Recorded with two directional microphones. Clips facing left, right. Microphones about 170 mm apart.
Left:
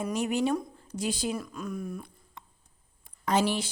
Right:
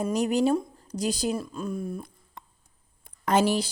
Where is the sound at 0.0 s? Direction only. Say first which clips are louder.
Right 4 dB; 40° right (ahead or behind).